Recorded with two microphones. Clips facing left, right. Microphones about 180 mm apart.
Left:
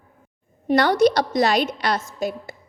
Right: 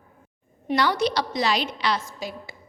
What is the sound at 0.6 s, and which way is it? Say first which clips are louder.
A woman's voice: left 6 dB; 50° left (ahead or behind).